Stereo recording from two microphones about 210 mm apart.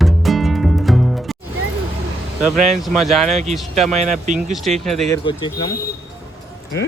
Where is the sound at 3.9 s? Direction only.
35° right (ahead or behind).